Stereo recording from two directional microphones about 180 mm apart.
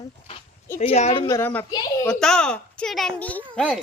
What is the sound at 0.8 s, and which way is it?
Speech, 35° left (ahead or behind).